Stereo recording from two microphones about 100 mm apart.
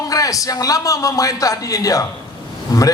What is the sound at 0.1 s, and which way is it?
A man's voice, 35° left (ahead or behind).